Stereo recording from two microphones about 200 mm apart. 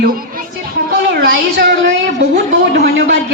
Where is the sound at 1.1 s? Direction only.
55° right (ahead or behind).